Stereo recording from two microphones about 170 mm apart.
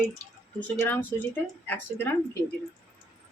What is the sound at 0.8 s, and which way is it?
Speech, 10° left (ahead or behind).